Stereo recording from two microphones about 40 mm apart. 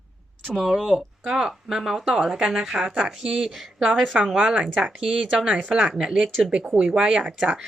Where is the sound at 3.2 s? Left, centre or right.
Centre.